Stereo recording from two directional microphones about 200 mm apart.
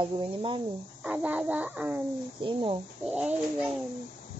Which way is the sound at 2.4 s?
25° right (ahead or behind).